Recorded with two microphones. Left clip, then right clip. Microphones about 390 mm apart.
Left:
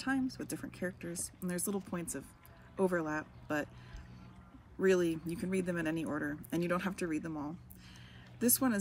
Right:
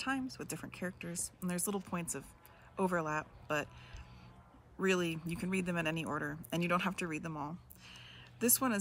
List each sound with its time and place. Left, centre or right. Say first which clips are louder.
0.0 s speech: left 2 dB; centre
4.7 s speech: left 4 dB; centre